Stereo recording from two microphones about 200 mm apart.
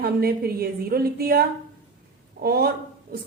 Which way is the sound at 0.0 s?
50° right (ahead or behind).